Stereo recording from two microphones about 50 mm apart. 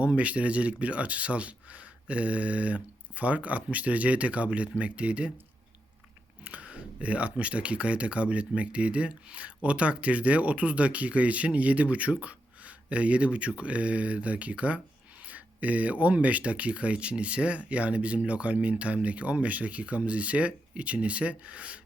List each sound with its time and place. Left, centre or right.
0.0 s speech: right
6.4 s speech: right